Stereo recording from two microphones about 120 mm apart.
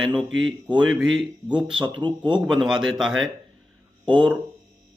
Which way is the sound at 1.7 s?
40° right (ahead or behind).